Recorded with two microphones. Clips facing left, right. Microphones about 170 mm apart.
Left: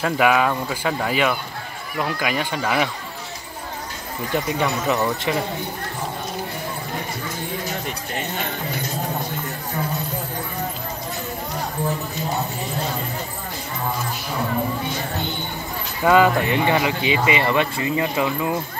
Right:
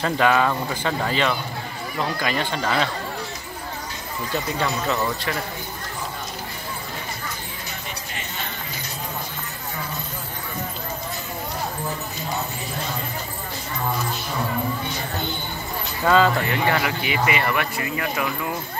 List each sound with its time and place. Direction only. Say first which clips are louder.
0.0 s speech: left 1 dB; 10° left (ahead or behind)
4.3 s speech: left 3 dB; 15° left (ahead or behind)
16.0 s speech: left 3 dB; 15° left (ahead or behind)